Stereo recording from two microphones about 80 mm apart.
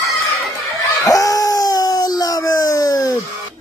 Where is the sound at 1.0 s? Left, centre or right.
Left.